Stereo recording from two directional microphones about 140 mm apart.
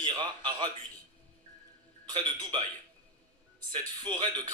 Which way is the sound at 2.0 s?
30° right (ahead or behind).